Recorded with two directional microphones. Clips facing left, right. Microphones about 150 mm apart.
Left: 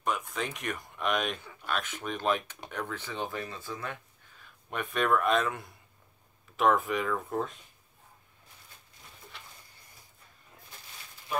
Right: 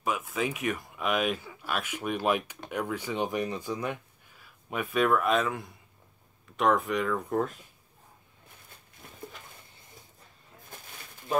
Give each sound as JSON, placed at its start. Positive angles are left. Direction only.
{"t": 0.0, "sound": "speech", "side_deg": -5}